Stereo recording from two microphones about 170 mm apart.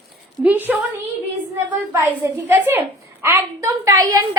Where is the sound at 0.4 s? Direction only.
10° right (ahead or behind).